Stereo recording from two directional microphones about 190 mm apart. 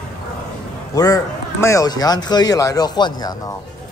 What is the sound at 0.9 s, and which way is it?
Speech, 20° left (ahead or behind).